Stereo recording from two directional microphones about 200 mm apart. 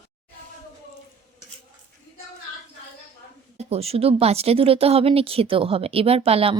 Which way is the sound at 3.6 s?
30° right (ahead or behind).